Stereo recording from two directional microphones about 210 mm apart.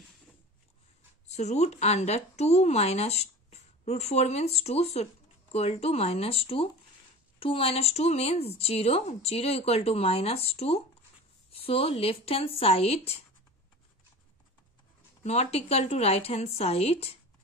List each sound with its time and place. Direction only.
1.2 s a woman's voice: 30° left (ahead or behind)
15.2 s a woman's voice: 30° left (ahead or behind)